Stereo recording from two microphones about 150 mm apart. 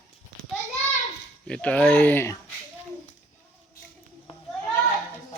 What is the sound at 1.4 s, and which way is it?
Speech, 10° left (ahead or behind).